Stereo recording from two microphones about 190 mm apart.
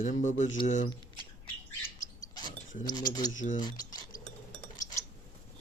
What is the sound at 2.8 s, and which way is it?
Speech, 20° left (ahead or behind).